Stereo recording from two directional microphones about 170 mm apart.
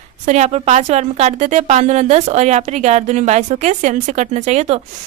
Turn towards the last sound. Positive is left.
turn(degrees=-40)  # may be behind; listen again after turning